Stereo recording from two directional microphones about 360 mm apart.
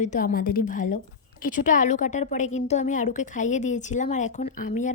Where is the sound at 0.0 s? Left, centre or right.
Left.